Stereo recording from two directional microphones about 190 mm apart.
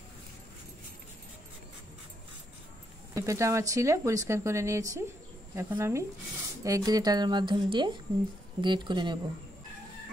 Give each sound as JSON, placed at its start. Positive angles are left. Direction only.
{"t": 3.2, "sound": "speech", "side_deg": -15}